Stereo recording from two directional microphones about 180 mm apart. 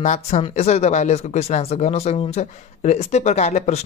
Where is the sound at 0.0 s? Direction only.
40° left (ahead or behind).